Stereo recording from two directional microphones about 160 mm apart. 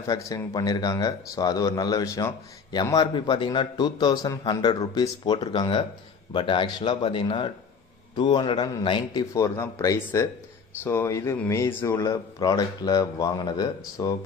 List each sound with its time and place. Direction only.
0.0 s speech: 20° left (ahead or behind)
9.3 s speech: 20° left (ahead or behind)